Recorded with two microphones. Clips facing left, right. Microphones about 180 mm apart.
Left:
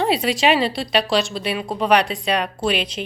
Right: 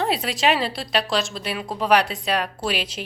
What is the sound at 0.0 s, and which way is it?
A woman's voice, centre (ahead or behind).